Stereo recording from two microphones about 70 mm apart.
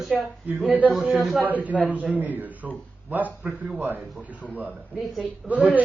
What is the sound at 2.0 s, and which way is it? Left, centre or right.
Speech, right.